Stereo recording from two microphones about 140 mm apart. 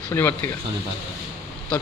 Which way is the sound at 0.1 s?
15° left (ahead or behind).